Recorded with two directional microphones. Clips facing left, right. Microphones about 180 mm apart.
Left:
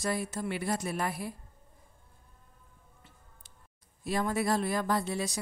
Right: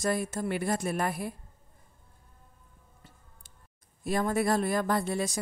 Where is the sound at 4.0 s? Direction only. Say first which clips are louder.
Right 3 dB; 50° right (ahead or behind).